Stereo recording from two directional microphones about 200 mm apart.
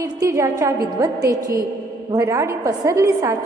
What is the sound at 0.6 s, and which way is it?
A woman's voice, 15° right (ahead or behind).